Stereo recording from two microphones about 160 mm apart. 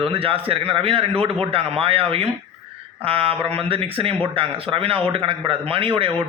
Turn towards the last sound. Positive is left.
turn(degrees=-35)  # may be behind; listen again after turning